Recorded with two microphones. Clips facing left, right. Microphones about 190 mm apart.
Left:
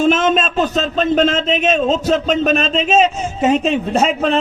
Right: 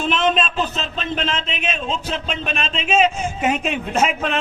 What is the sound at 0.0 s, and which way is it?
Speech, 45° left (ahead or behind).